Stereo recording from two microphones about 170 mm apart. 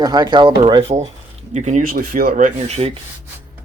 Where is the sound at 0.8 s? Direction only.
40° right (ahead or behind).